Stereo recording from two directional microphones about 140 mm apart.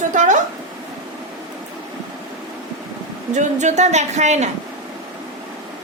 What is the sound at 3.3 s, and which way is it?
Speech, 60° right (ahead or behind).